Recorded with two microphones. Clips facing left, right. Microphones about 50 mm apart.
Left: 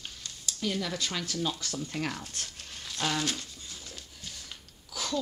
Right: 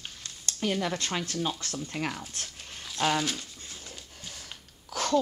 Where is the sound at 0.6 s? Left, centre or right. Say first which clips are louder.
Right 3 dB; right.